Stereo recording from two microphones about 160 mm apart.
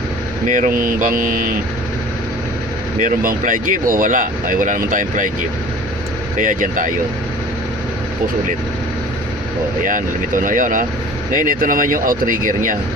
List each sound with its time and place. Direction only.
0.4 s speech: 55° right (ahead or behind)
3.0 s speech: 60° right (ahead or behind)
6.4 s speech: 60° right (ahead or behind)
9.8 s speech: 55° right (ahead or behind)